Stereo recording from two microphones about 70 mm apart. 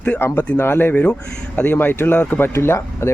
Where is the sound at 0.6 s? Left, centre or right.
Left.